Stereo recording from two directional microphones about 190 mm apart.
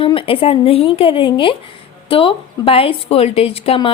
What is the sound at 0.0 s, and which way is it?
A woman's voice, 30° left (ahead or behind).